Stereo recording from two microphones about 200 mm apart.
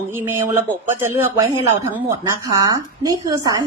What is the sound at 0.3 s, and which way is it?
A woman's voice, 15° right (ahead or behind).